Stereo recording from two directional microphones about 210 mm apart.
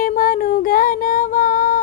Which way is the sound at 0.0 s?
40° left (ahead or behind).